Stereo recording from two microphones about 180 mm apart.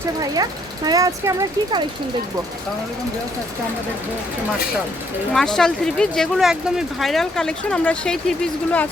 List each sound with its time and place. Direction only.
0.9 s speech: 20° right (ahead or behind)
5.3 s speech: centre (ahead or behind)